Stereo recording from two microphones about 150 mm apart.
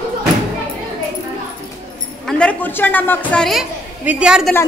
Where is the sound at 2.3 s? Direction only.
5° left (ahead or behind).